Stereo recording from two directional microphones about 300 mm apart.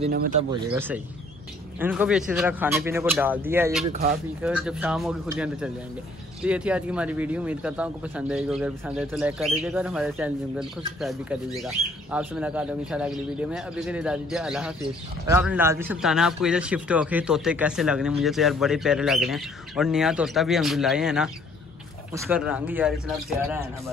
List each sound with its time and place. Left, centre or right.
0.0 s speech: right
0.5 s speech: centre
3.8 s speech: right
4.4 s a man's voice: centre